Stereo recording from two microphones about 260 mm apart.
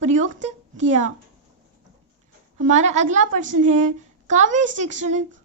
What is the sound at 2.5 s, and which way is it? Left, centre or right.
Speech, right.